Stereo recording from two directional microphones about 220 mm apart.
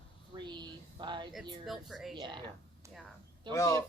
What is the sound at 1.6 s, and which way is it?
Speech, centre (ahead or behind).